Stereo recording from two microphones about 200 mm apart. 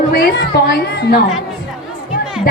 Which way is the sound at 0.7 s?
50° left (ahead or behind).